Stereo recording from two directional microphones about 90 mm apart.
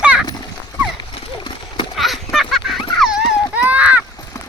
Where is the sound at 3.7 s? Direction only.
15° right (ahead or behind).